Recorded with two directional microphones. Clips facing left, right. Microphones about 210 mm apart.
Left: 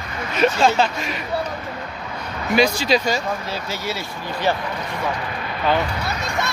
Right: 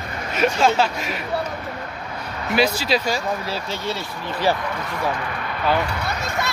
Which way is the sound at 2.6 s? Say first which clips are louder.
Left 2 dB; 5° right (ahead or behind).